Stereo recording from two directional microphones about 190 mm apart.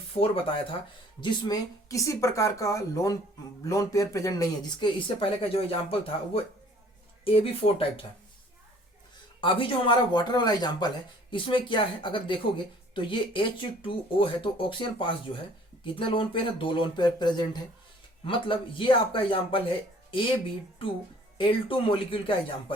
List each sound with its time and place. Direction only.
0.1 s speech: 30° left (ahead or behind)
9.4 s speech: 25° left (ahead or behind)